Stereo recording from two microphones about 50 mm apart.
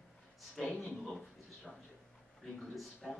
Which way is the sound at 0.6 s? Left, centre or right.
Centre.